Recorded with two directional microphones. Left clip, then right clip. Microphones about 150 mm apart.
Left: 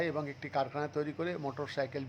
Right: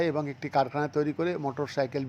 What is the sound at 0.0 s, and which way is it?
Speech, 25° right (ahead or behind).